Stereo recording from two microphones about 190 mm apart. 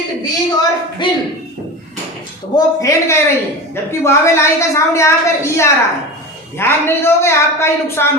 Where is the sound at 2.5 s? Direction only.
15° left (ahead or behind).